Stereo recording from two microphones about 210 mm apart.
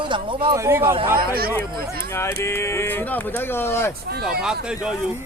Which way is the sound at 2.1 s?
15° left (ahead or behind).